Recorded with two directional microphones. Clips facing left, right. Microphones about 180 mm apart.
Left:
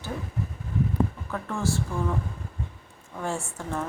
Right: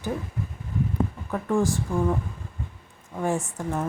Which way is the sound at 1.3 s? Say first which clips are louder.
Right 5 dB; 15° right (ahead or behind).